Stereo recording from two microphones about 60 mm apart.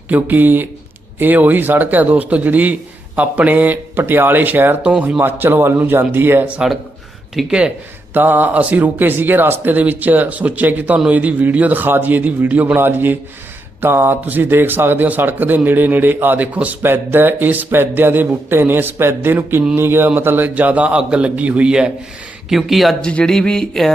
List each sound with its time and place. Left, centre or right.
0.1 s a man's voice: right
6.6 s a man's voice: centre
8.1 s a man's voice: right
12.7 s speech: right
16.8 s speech: right
20.6 s a man's voice: right; by 23.0 s centre
23.0 s speech: centre